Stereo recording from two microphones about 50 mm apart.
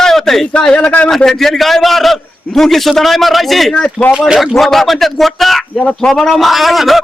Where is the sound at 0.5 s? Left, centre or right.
Left.